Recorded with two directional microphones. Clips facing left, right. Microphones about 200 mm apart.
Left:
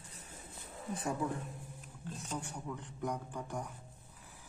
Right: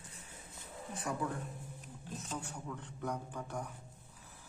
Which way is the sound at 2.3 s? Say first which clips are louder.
Left 2 dB; 15° left (ahead or behind).